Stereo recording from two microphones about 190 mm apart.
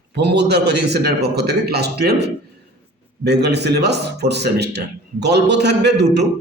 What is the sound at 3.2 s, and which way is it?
A man's voice, 60° right (ahead or behind).